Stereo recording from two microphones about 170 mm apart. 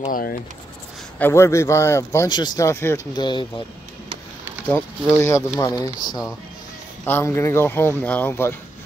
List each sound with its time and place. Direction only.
0.1 s speech: 60° left (ahead or behind)
1.2 s a man's voice: 15° left (ahead or behind)
3.2 s speech: 30° left (ahead or behind)
5.1 s a man's voice: 15° left (ahead or behind)